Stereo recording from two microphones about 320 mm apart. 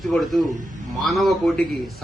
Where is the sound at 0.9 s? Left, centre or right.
Centre.